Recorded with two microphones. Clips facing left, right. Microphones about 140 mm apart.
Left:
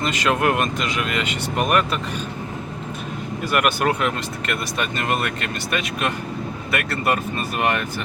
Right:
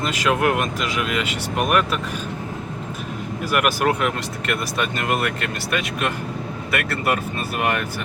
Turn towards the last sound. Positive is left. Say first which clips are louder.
# left 1 dB
turn(degrees=-5)  # may be behind; listen again after turning